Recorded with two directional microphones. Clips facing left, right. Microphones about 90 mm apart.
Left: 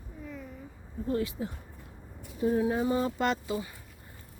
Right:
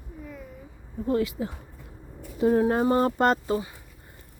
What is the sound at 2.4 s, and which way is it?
Speech, 65° right (ahead or behind).